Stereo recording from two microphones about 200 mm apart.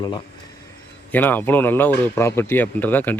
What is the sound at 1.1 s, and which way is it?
Speech, 10° left (ahead or behind).